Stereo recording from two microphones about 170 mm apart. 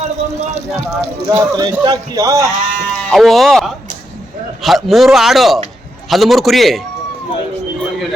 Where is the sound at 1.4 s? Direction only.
25° right (ahead or behind).